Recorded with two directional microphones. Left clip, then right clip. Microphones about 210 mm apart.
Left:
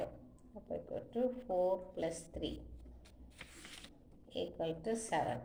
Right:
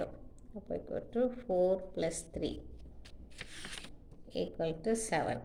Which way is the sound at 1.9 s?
45° right (ahead or behind).